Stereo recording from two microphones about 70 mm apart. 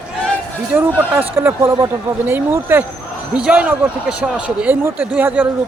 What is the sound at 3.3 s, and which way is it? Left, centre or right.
Speech, centre.